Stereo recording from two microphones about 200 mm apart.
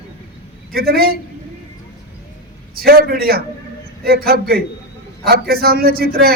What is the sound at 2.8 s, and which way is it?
A man's voice, 50° right (ahead or behind).